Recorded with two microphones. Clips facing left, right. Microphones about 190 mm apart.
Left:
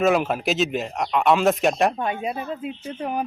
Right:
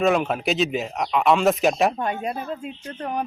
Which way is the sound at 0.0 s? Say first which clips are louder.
Even; centre (ahead or behind).